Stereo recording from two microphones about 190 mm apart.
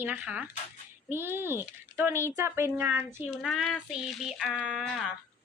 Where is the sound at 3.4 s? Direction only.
Centre (ahead or behind).